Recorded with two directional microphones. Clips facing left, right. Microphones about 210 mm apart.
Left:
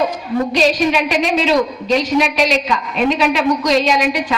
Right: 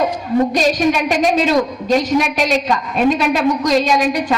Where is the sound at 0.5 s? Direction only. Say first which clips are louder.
Even; 45° right (ahead or behind).